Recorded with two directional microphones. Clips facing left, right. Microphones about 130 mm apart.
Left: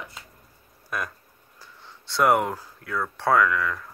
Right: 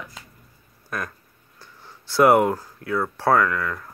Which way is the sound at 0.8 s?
10° left (ahead or behind).